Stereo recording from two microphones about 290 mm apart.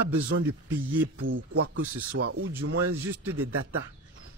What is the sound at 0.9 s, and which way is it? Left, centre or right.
A man's voice, right.